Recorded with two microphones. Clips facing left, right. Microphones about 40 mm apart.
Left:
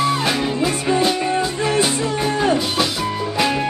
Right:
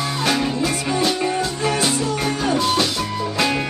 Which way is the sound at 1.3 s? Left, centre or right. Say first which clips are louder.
Left 3 dB; left.